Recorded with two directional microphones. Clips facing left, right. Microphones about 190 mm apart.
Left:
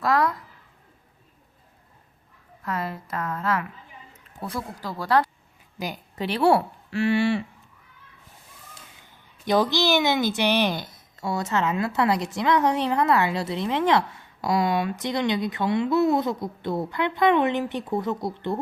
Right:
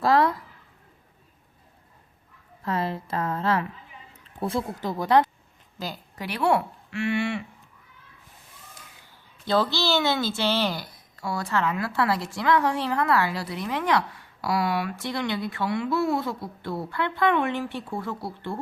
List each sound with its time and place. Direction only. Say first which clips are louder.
0.0 s a woman's voice: right 2 dB; 25° right (ahead or behind)
2.6 s a woman's voice: right 2 dB; 25° right (ahead or behind)
5.8 s a woman's voice: left 3 dB; 15° left (ahead or behind)
6.2 s speech: left 3 dB; 30° left (ahead or behind)
9.5 s a woman's voice: left 2 dB; 15° left (ahead or behind)